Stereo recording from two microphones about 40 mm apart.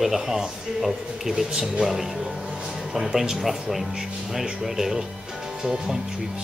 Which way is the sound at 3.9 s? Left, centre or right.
Centre.